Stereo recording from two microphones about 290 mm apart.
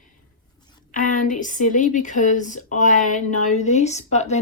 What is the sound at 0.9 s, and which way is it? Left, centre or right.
A woman's voice, left.